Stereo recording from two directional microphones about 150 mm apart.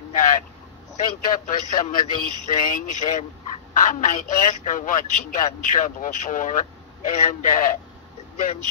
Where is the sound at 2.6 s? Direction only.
60° left (ahead or behind).